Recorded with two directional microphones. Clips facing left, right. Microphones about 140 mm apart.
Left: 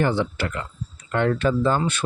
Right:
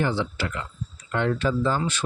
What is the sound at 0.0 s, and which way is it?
Speech, 55° left (ahead or behind).